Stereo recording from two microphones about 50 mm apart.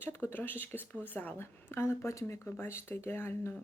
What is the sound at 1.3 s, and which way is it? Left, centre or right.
Speech, left.